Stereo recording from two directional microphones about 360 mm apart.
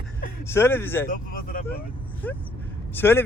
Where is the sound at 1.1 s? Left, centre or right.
Left.